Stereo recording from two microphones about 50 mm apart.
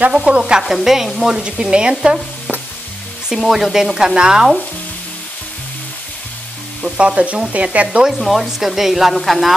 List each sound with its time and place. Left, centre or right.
0.4 s frying: centre
0.7 s frying: centre
1.6 s frying: centre
3.3 s frying: centre
6.8 s speech: right
8.2 s frying: centre